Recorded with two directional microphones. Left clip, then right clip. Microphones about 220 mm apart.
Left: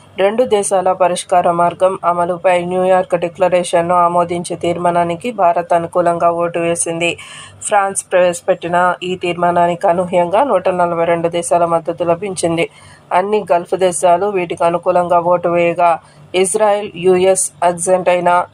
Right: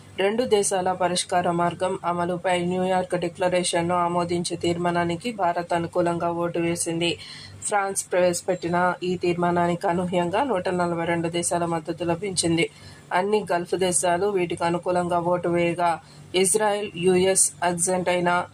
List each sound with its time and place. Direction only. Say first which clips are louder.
0.2 s speech: left 9 dB; 15° left (ahead or behind)